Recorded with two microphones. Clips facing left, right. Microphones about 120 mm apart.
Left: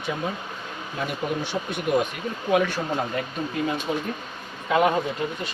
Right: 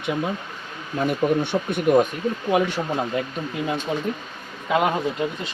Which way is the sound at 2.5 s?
20° right (ahead or behind).